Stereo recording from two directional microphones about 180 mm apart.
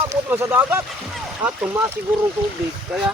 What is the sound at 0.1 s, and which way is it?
Speech, 10° right (ahead or behind).